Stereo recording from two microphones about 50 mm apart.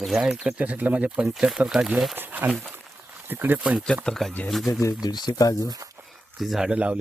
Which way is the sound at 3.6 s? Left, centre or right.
Centre.